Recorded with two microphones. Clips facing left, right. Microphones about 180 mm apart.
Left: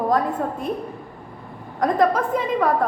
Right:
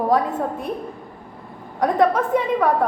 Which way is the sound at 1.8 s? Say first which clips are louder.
Right 1 dB; 5° right (ahead or behind).